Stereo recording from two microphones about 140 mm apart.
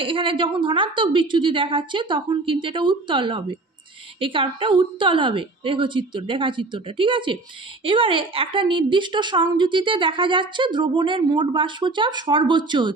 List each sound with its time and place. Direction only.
0.0 s a woman's voice: 40° right (ahead or behind)